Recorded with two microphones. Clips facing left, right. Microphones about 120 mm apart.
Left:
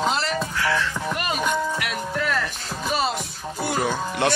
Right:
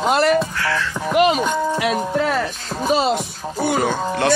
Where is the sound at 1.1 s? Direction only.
90° right.